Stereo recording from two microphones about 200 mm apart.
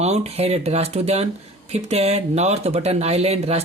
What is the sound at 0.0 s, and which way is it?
Speech, 35° right (ahead or behind).